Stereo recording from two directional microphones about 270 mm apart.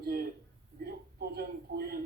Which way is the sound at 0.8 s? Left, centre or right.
Right.